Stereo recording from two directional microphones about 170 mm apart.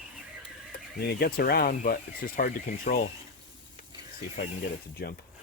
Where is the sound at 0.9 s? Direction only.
70° left (ahead or behind).